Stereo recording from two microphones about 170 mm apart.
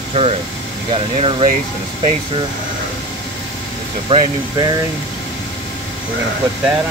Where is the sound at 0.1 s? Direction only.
35° right (ahead or behind).